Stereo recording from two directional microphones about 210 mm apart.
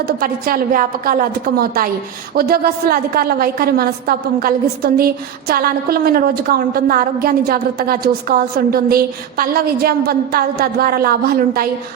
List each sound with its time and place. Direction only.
0.2 s a woman's voice: 45° right (ahead or behind)